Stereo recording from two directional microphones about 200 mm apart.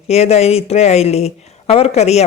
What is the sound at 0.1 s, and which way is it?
Speech, 30° left (ahead or behind).